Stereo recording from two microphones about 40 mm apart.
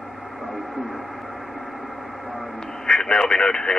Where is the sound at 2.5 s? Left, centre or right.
Centre.